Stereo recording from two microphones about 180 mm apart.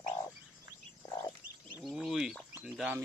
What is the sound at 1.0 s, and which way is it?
Bird, 20° left (ahead or behind).